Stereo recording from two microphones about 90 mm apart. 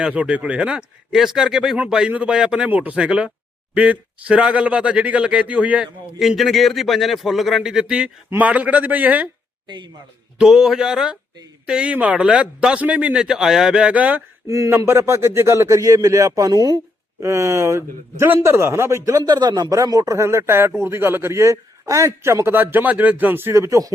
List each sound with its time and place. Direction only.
0.0 s speech: 15° right (ahead or behind)
6.1 s speech: centre (ahead or behind); by 9.3 s 15° right (ahead or behind)
9.6 s speech: 55° right (ahead or behind)
10.3 s speech: 5° right (ahead or behind)
14.4 s a man's voice: 35° right (ahead or behind)
17.2 s a man's voice: 30° right (ahead or behind); by 19.7 s 55° right (ahead or behind)
19.7 s a man's voice: 40° right (ahead or behind)